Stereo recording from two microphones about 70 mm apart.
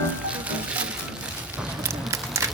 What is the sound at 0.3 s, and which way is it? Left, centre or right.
Music, centre.